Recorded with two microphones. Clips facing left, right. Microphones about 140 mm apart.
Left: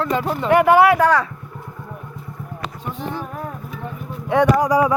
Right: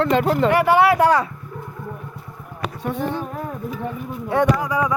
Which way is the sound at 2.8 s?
55° right (ahead or behind).